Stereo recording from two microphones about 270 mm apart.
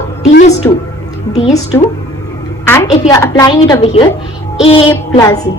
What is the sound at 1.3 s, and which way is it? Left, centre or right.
Speech, left.